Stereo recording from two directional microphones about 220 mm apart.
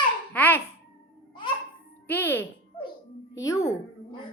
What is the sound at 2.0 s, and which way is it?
Music, 10° left (ahead or behind).